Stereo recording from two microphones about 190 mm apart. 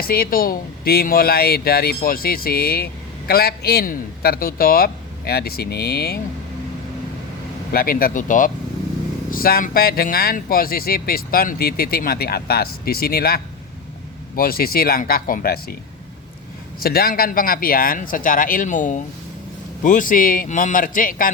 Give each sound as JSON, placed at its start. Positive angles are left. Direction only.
{"t": 0.0, "sound": "speech", "side_deg": 50}
{"t": 7.7, "sound": "speech", "side_deg": 50}
{"t": 16.8, "sound": "speech", "side_deg": 50}